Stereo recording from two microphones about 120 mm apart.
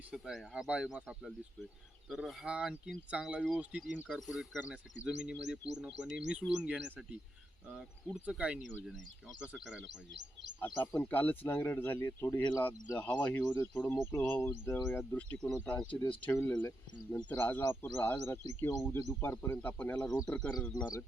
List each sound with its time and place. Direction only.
0.1 s speech: 5° right (ahead or behind)
8.1 s speech: 5° right (ahead or behind)
10.6 s speech: 15° left (ahead or behind)
20.7 s speech: 35° left (ahead or behind)